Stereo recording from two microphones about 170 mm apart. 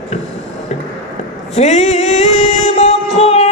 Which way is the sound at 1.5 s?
40° left (ahead or behind).